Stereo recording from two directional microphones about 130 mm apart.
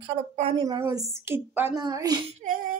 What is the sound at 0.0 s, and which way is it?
Speech, 45° right (ahead or behind).